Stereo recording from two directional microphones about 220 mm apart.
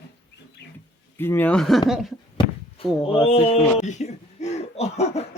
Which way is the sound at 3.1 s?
25° left (ahead or behind).